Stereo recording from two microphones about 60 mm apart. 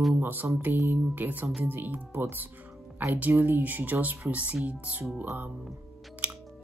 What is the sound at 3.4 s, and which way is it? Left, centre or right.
Speech, right.